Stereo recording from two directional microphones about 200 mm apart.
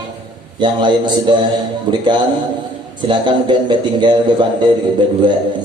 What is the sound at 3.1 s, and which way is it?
Speech, 25° right (ahead or behind).